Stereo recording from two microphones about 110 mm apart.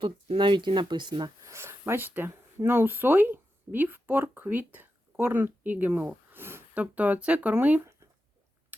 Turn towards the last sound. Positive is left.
turn(degrees=-20)  # may be behind; listen again after turning